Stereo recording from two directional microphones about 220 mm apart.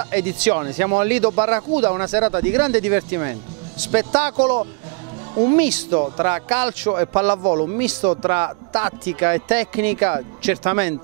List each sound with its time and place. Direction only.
0.1 s speech: 15° right (ahead or behind)
4.4 s speech: 25° right (ahead or behind)
7.4 s speech: 25° right (ahead or behind)